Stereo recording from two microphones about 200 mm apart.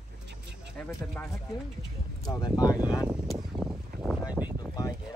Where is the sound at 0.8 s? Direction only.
5° left (ahead or behind).